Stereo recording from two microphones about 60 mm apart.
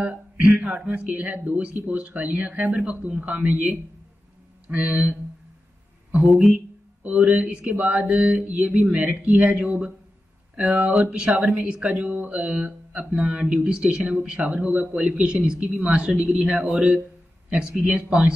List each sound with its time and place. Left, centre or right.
0.6 s speech: right
6.2 s speech: centre
6.5 s a sound: right
7.3 s speech: centre